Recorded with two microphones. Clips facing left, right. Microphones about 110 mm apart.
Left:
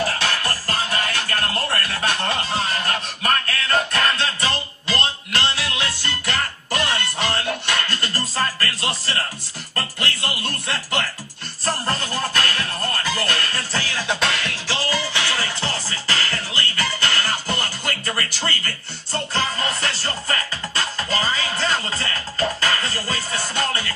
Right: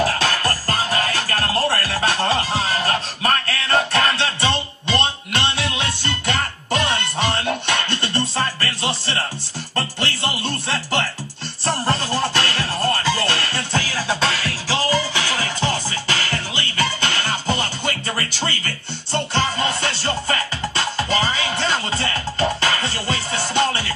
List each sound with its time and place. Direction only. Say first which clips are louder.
0.2 s music: right 3 dB; 40° right (ahead or behind)
11.6 s music: right 3 dB; 30° right (ahead or behind)
14.7 s music: right 5 dB; 15° right (ahead or behind)